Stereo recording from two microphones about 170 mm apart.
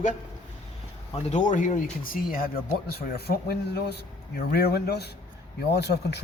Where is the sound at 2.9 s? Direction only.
70° left (ahead or behind).